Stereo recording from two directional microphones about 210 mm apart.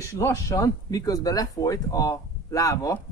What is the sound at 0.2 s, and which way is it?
Speech, 15° left (ahead or behind).